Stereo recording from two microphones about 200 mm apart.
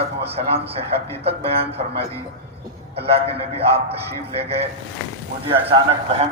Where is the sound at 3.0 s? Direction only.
30° right (ahead or behind).